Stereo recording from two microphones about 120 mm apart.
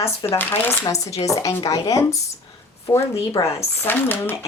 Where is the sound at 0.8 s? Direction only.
25° left (ahead or behind).